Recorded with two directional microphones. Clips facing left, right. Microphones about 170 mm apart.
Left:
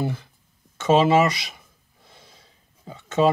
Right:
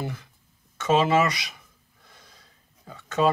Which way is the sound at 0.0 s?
30° left (ahead or behind).